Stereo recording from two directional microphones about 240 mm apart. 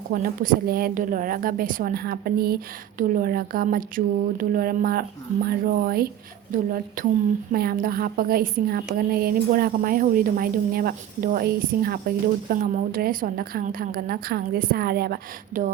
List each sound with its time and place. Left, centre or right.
0.1 s a woman's voice: right